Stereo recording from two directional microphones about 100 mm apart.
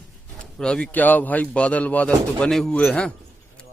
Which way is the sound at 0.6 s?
5° left (ahead or behind).